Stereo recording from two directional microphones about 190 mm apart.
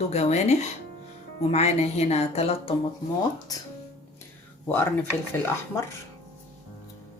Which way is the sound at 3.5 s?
20° left (ahead or behind).